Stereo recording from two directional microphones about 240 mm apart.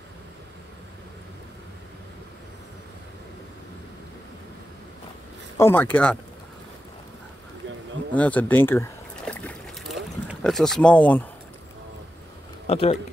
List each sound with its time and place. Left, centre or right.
5.6 s speech: centre
8.1 s a sound: centre
12.6 s speech: left